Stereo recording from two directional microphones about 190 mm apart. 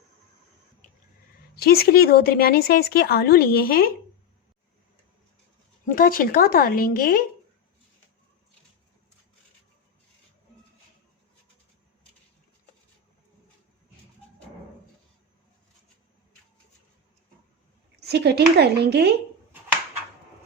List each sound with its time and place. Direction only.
1.5 s speech: 55° left (ahead or behind)
5.8 s speech: 50° left (ahead or behind)
18.0 s speech: 60° right (ahead or behind)